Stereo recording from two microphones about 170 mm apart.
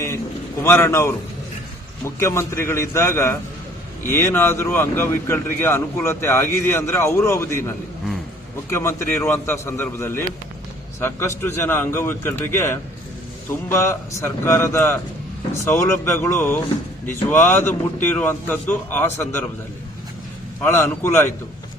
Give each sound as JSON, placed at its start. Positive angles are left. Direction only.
{"t": 0.6, "sound": "speech", "side_deg": 15}
{"t": 8.7, "sound": "speech", "side_deg": 15}
{"t": 20.7, "sound": "speech", "side_deg": 15}